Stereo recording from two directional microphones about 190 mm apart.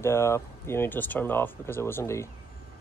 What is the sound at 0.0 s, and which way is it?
Speech, 15° left (ahead or behind).